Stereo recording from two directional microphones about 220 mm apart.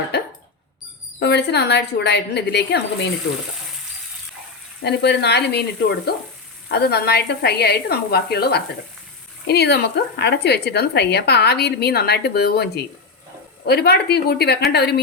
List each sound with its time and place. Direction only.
0.1 s cough: 50° left (ahead or behind)
1.2 s speech: 50° left (ahead or behind)
4.8 s speech: 50° left (ahead or behind)
6.7 s speech: 45° left (ahead or behind)